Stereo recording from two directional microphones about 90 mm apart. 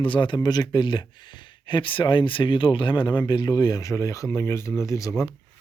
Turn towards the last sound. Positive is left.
turn(degrees=35)  # may be behind; listen again after turning